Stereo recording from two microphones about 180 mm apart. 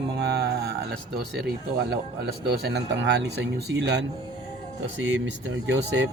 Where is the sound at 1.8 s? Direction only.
65° right (ahead or behind).